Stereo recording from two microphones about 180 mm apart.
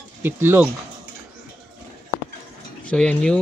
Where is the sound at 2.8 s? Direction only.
5° left (ahead or behind).